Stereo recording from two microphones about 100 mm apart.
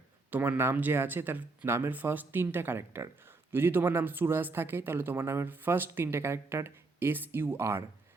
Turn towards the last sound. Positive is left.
turn(degrees=-25)  # may be behind; listen again after turning